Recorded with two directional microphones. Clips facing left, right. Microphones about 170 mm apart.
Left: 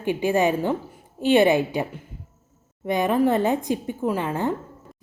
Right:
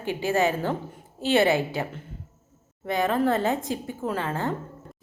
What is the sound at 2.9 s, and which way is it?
A woman's voice, 15° left (ahead or behind).